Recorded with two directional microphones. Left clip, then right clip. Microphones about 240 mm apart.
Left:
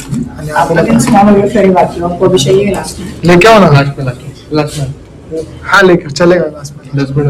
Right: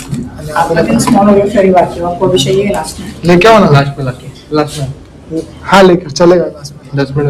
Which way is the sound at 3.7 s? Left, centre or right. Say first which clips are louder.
Even; right.